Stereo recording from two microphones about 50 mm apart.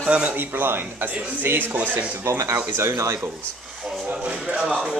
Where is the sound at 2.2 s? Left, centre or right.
Right.